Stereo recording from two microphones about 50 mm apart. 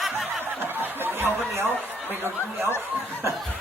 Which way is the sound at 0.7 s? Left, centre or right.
Right.